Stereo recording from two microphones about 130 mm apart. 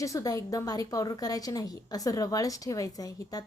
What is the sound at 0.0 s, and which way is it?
A woman's voice, 25° left (ahead or behind).